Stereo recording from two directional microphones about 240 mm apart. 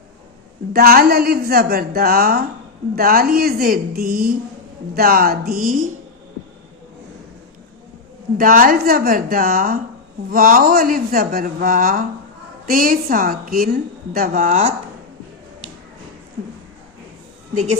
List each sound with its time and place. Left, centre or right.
0.7 s a woman's voice: right
8.4 s a woman's voice: right